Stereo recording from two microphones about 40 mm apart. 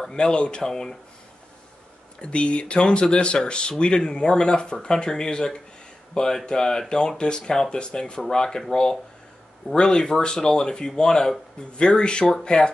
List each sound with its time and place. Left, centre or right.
0.1 s speech: left
2.1 s speech: left